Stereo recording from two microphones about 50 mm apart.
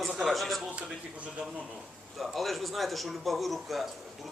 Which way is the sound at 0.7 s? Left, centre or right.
Right.